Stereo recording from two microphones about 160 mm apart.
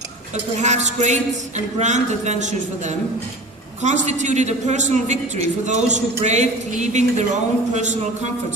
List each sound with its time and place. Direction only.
0.5 s speech: 45° right (ahead or behind)